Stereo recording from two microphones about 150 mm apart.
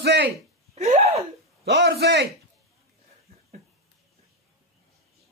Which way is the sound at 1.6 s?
90° right.